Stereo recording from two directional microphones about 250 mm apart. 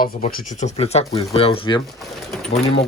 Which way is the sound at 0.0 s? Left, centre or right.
Left.